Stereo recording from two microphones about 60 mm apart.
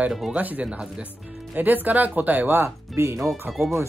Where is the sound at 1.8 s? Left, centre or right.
Right.